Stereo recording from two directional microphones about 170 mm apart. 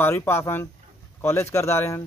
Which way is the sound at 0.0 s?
15° left (ahead or behind).